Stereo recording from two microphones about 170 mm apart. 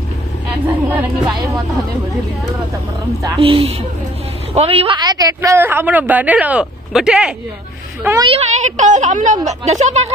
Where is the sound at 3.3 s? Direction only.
30° right (ahead or behind); by 8.2 s 15° right (ahead or behind).